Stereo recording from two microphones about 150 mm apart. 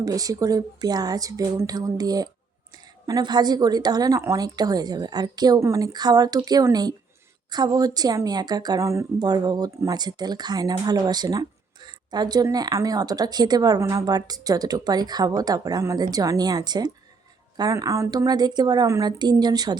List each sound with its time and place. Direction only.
0.0 s speech: 25° right (ahead or behind)